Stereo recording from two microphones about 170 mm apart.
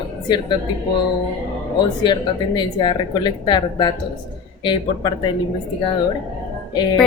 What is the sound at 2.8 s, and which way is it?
Speech, 25° left (ahead or behind).